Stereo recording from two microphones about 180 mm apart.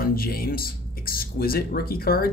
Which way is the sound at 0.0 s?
55° left (ahead or behind).